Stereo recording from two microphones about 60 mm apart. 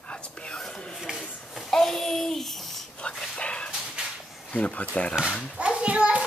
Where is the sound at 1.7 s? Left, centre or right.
Centre.